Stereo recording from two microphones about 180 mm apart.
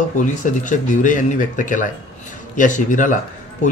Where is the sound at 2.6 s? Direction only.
45° left (ahead or behind).